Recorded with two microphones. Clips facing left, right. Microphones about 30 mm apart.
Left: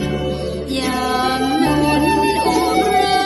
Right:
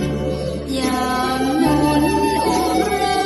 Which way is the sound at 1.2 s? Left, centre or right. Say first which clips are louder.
Left 1 dB; left.